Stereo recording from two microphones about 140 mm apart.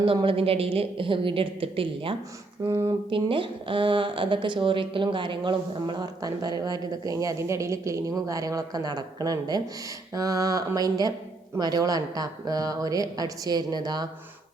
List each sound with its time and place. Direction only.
0.0 s a woman's voice: 40° right (ahead or behind)
2.6 s a woman's voice: 20° right (ahead or behind)
3.1 s a woman's voice: 40° right (ahead or behind)